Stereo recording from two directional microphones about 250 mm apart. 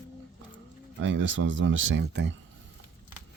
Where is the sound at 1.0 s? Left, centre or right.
Right.